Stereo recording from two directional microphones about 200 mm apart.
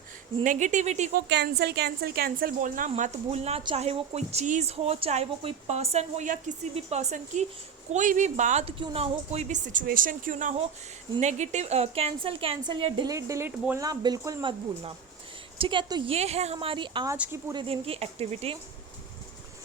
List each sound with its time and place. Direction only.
0.4 s a woman's voice: 40° right (ahead or behind)
1.3 s a woman's voice: 55° right (ahead or behind); by 18.5 s 30° right (ahead or behind)